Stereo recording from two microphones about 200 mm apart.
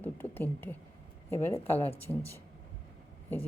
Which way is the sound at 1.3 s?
10° left (ahead or behind).